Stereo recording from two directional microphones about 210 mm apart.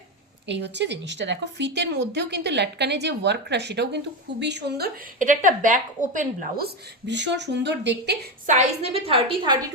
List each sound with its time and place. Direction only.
0.4 s a woman's voice: 55° right (ahead or behind)
5.2 s a woman's voice: 40° right (ahead or behind)
7.1 s a woman's voice: 55° right (ahead or behind)
8.4 s a woman's voice: 30° right (ahead or behind)